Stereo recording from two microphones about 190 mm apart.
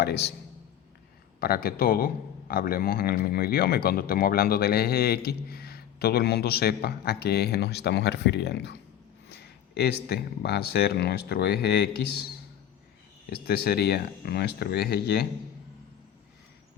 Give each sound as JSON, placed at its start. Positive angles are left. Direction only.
{"t": 0.0, "sound": "speech", "side_deg": 60}
{"t": 1.4, "sound": "speech", "side_deg": 55}
{"t": 13.3, "sound": "speech", "side_deg": 55}